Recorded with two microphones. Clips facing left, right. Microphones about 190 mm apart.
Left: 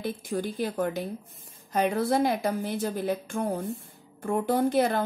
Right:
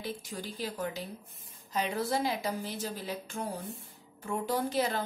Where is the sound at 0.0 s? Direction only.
55° left (ahead or behind).